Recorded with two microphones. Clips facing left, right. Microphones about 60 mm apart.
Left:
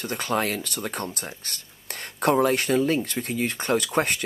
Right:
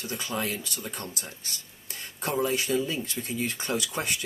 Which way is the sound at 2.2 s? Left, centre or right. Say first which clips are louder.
Left 7 dB; left.